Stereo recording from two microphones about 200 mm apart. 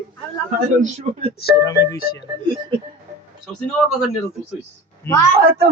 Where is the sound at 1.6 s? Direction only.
15° left (ahead or behind).